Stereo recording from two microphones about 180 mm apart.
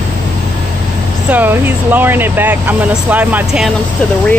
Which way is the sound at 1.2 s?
10° right (ahead or behind).